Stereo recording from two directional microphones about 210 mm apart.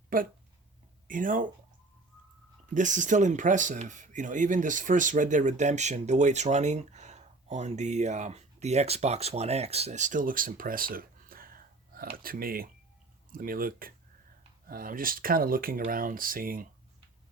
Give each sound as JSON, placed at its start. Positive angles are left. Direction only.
{"t": 0.1, "sound": "speech", "side_deg": -40}
{"t": 2.6, "sound": "speech", "side_deg": -35}